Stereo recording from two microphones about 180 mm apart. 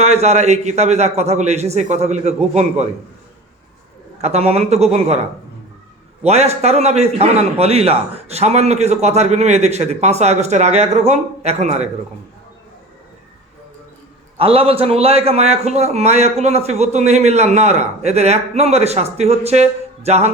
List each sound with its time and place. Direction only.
0.0 s a man's voice: 35° right (ahead or behind)
4.2 s a man's voice: 35° right (ahead or behind)
6.2 s a man's voice: 35° right (ahead or behind)
14.3 s a man's voice: 30° right (ahead or behind)